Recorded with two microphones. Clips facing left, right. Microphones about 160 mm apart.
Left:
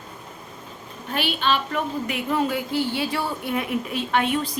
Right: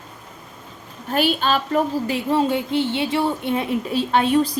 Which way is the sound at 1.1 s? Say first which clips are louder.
Right 4 dB; 40° right (ahead or behind).